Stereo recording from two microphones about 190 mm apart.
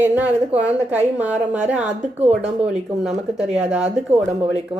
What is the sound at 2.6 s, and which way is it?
A woman's voice, 5° right (ahead or behind).